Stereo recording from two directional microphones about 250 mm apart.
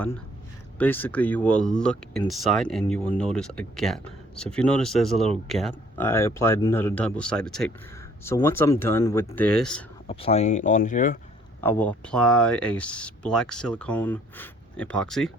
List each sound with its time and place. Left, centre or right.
0.8 s speech: centre
10.1 s speech: left
11.6 s speech: centre